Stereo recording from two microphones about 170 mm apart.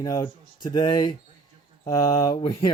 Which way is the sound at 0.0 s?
20° left (ahead or behind).